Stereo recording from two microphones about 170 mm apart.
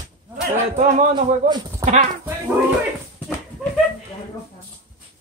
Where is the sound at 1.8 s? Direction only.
45° right (ahead or behind).